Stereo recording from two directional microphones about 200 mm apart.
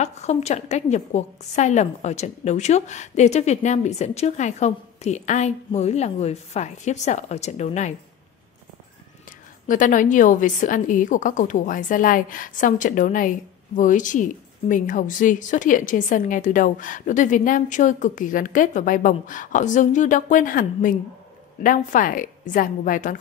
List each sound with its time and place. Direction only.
0.0 s a woman's voice: 35° left (ahead or behind)
9.7 s a woman's voice: 40° left (ahead or behind)